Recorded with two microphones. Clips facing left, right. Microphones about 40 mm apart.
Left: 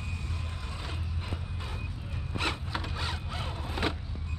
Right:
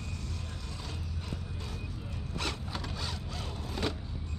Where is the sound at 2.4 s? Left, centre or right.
Left.